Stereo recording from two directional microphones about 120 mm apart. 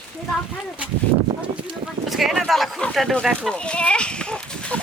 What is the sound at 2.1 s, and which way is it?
Speech, centre (ahead or behind).